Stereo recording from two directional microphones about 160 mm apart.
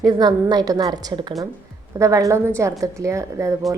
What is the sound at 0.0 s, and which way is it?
A woman's voice, 25° right (ahead or behind).